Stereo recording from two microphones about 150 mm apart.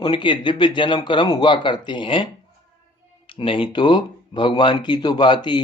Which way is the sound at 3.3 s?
35° left (ahead or behind).